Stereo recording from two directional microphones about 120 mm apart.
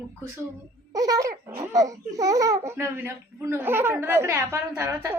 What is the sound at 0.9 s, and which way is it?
Speech, 30° right (ahead or behind).